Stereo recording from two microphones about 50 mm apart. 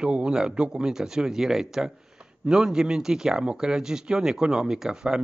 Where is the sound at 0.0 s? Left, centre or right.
Centre.